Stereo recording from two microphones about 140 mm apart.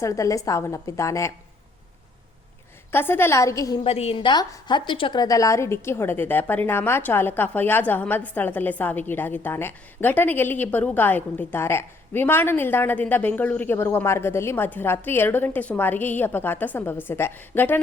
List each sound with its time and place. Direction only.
0.0 s a woman's voice: 20° left (ahead or behind)
2.9 s a woman's voice: 15° left (ahead or behind)
3.8 s a woman's voice: 45° left (ahead or behind); by 17.7 s 15° left (ahead or behind)